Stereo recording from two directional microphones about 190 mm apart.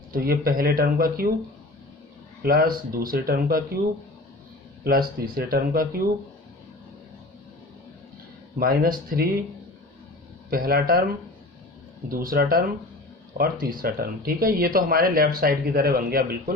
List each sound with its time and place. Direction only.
0.1 s speech: 50° right (ahead or behind)
2.4 s speech: 50° right (ahead or behind)
4.8 s speech: 50° right (ahead or behind)
8.5 s speech: 50° right (ahead or behind)
10.5 s speech: 55° right (ahead or behind)
12.2 s speech: 50° right (ahead or behind)